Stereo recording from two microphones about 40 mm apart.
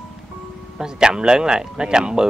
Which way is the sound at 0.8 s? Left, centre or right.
Centre.